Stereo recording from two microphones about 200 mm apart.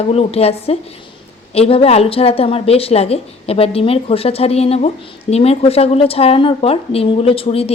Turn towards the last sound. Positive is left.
turn(degrees=30)  # may be behind; listen again after turning